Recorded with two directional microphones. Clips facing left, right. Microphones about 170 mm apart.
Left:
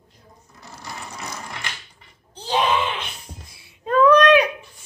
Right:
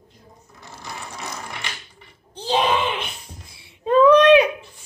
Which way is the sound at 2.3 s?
25° right (ahead or behind).